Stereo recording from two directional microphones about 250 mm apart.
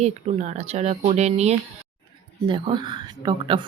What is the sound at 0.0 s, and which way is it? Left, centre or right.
Speech, right.